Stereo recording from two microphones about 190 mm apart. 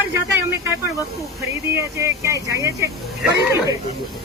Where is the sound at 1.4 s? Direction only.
15° right (ahead or behind).